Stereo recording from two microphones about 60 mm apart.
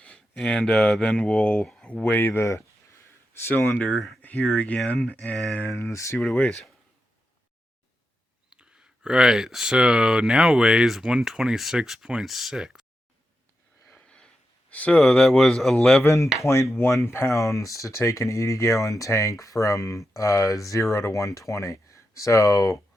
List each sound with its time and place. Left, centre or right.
0.3 s speech: centre
1.6 s a sound: centre
2.0 s speech: left
2.4 s speech: left
3.8 s speech: left
5.7 s speech: left
6.1 s speech: left
8.5 s speech: centre
13.9 s a sound: centre
14.7 s speech: left
14.9 s speech: centre
16.0 s speech: left